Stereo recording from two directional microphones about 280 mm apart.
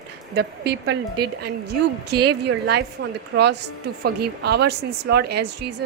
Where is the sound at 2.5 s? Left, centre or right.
Right.